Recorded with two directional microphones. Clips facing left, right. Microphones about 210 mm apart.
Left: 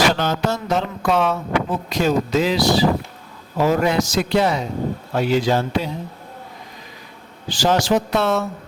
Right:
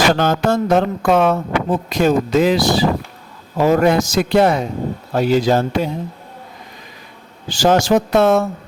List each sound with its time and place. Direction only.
0.1 s speech: 50° right (ahead or behind)
5.1 s speech: 40° right (ahead or behind)
7.5 s speech: 45° right (ahead or behind)